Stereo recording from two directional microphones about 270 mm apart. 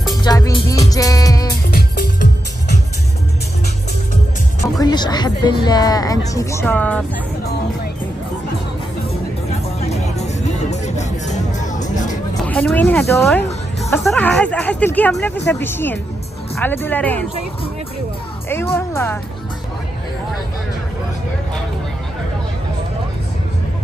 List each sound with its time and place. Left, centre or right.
0.1 s music: centre
1.7 s music: left
4.7 s a woman's voice: centre
9.8 s music: left
12.4 s a woman's voice: centre
18.5 s music: centre